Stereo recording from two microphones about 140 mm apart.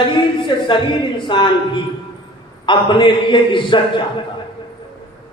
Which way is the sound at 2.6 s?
35° left (ahead or behind).